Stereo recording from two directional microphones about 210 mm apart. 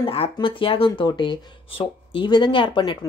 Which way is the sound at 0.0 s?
25° left (ahead or behind).